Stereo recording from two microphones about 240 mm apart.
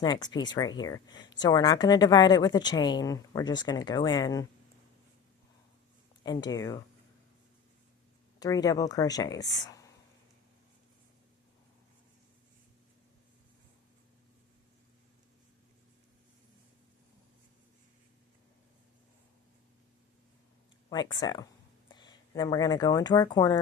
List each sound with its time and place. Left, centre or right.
0.0 s speech: centre
6.2 s speech: centre
8.4 s speech: centre
20.9 s speech: centre